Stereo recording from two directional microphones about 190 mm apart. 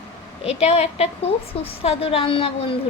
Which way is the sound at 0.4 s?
35° left (ahead or behind).